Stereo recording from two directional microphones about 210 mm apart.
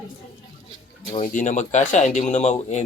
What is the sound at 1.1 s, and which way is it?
Speech, 35° left (ahead or behind).